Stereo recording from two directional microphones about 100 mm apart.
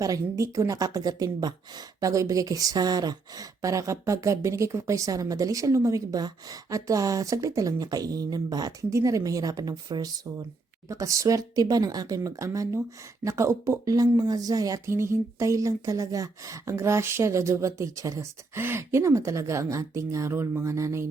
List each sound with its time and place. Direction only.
0.0 s speech: 35° right (ahead or behind)